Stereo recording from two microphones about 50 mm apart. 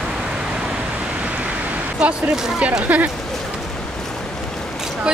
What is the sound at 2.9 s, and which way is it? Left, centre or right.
Speech, right.